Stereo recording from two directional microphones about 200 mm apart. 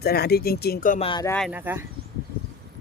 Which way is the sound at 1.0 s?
25° left (ahead or behind).